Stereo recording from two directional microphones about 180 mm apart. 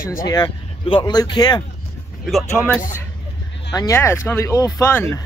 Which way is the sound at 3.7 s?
20° left (ahead or behind).